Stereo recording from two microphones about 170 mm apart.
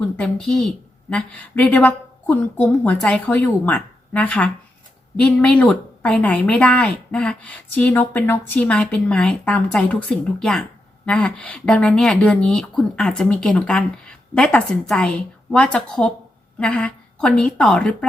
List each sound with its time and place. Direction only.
0.2 s speech: 5° left (ahead or behind)